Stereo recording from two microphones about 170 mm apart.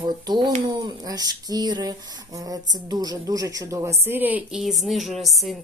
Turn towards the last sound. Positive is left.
turn(degrees=0)  # may be behind; listen again after turning